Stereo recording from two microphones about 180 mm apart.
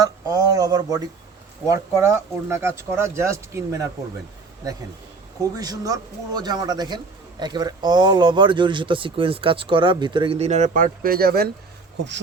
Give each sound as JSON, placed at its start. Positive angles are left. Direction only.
{"t": 0.0, "sound": "a man's voice", "side_deg": -20}
{"t": 5.4, "sound": "a man's voice", "side_deg": -20}